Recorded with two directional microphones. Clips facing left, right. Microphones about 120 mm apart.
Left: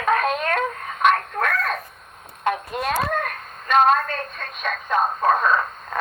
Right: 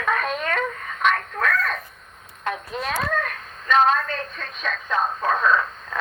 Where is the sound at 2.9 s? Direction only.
45° left (ahead or behind).